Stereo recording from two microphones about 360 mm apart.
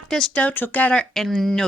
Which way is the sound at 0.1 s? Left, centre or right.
Centre.